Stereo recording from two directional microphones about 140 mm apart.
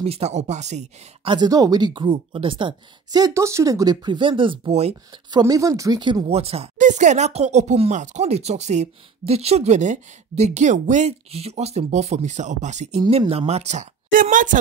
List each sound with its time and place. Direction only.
0.0 s speech: 50° right (ahead or behind)
1.2 s speech: 30° right (ahead or behind); by 5.2 s 50° right (ahead or behind)
5.4 s speech: 25° right (ahead or behind)
6.3 s speech: 45° right (ahead or behind)
6.8 s speech: 60° right (ahead or behind)